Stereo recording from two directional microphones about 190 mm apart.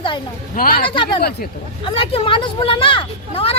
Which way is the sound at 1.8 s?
30° left (ahead or behind).